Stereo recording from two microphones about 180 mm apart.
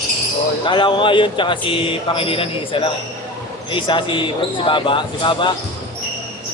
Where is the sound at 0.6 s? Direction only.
25° left (ahead or behind).